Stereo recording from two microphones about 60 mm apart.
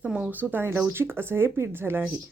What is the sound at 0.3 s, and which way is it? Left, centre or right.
Speech, right.